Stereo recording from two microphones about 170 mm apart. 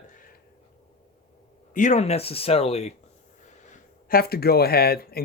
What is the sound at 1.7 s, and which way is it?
Speech, 45° left (ahead or behind).